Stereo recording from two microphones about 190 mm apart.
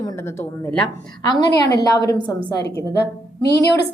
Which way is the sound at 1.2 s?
20° left (ahead or behind).